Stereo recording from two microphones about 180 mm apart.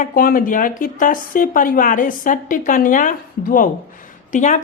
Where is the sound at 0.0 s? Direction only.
55° left (ahead or behind).